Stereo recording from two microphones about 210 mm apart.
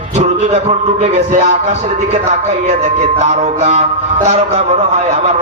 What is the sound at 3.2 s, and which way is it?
A man's voice, 30° right (ahead or behind).